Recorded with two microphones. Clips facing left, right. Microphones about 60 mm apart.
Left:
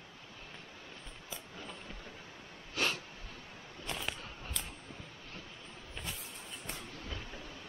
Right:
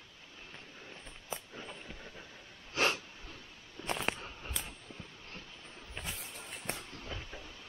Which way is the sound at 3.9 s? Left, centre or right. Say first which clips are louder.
Right 5 dB; right.